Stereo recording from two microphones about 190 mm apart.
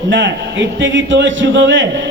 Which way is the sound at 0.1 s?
70° right (ahead or behind).